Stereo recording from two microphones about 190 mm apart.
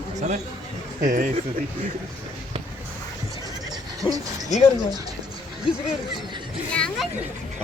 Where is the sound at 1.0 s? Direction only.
45° right (ahead or behind).